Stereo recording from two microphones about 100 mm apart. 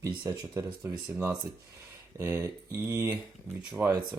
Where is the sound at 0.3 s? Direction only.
35° right (ahead or behind).